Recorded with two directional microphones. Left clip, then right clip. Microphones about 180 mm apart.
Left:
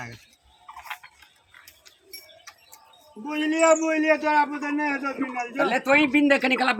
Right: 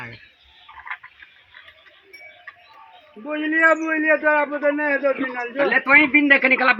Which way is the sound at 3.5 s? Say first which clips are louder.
Right 2 dB; 50° left (ahead or behind).